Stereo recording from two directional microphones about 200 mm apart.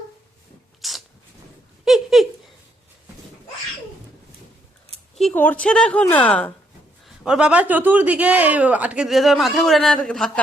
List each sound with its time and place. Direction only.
0.8 s a sound: centre (ahead or behind)
5.1 s a woman's voice: 5° left (ahead or behind)
7.0 s speech: 5° right (ahead or behind)